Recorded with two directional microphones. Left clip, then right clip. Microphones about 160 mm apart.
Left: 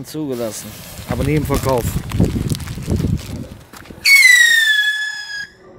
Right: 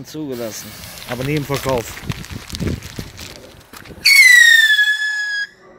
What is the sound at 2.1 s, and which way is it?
Boat, 25° right (ahead or behind).